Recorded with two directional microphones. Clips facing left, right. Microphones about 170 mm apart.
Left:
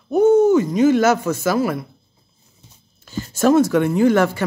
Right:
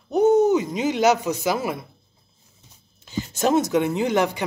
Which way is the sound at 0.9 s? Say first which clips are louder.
Left 4 dB; 15° right (ahead or behind).